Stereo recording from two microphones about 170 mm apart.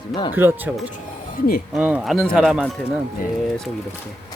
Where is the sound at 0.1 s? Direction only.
25° left (ahead or behind).